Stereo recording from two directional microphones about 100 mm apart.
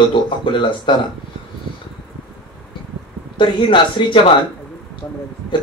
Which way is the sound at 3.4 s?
55° left (ahead or behind).